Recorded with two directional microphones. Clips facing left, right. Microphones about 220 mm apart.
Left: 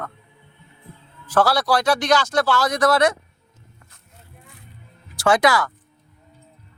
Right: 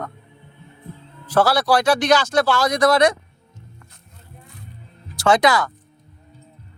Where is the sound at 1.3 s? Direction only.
10° right (ahead or behind).